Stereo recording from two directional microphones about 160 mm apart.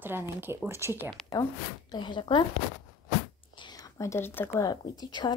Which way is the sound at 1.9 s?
30° left (ahead or behind).